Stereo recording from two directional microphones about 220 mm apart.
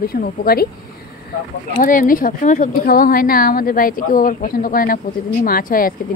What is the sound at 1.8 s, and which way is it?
Speech, 40° left (ahead or behind).